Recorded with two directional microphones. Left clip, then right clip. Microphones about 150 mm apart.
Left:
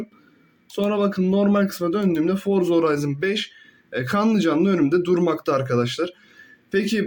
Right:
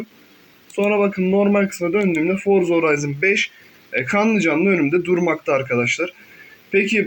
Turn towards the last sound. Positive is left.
turn(degrees=40)  # may be behind; listen again after turning